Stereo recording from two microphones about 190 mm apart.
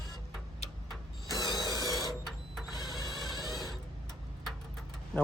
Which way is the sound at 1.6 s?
Centre (ahead or behind).